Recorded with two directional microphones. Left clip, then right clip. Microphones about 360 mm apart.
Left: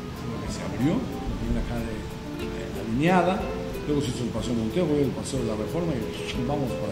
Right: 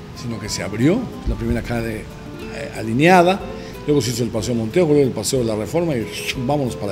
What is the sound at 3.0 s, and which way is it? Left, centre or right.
Speech, right.